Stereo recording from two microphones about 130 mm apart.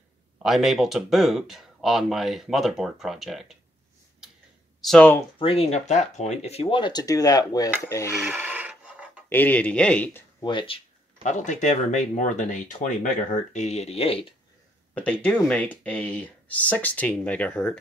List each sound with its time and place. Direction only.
0.4 s speech: 5° right (ahead or behind)
4.8 s speech: 5° left (ahead or behind)
5.4 s speech: 50° left (ahead or behind); by 7.7 s 30° left (ahead or behind)
7.7 s filing: 20° left (ahead or behind)
8.3 s a sound: 15° right (ahead or behind)
9.3 s speech: 15° left (ahead or behind)
10.4 s speech: 40° left (ahead or behind)
11.2 s speech: 70° left (ahead or behind); by 14.3 s 45° left (ahead or behind)
15.0 s speech: 10° left (ahead or behind)